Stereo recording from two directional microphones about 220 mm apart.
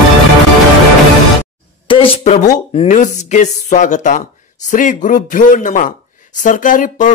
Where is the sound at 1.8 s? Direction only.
25° left (ahead or behind).